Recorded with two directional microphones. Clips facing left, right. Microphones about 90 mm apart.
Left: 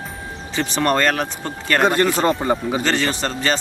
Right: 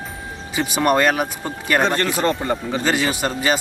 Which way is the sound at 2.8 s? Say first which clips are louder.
Right 3 dB; 10° right (ahead or behind).